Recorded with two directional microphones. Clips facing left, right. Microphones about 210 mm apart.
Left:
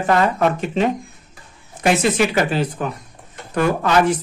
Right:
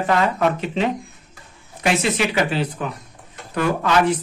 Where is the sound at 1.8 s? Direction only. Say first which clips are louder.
Left 3 dB; 45° left (ahead or behind).